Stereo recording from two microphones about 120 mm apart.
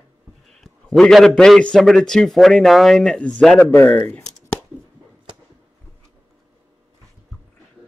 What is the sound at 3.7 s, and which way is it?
Speech, 15° left (ahead or behind).